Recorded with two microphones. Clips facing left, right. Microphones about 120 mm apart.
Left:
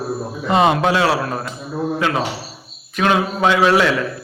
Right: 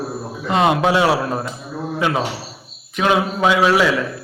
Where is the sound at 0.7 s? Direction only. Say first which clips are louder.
Right 1 dB; 15° right (ahead or behind).